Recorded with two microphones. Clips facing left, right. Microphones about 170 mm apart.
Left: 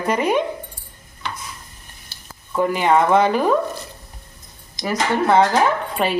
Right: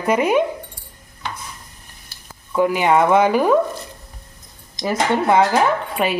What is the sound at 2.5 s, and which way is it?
Speech, 5° right (ahead or behind).